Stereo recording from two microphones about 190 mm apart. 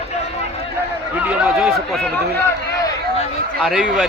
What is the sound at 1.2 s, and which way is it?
Speech, 5° right (ahead or behind).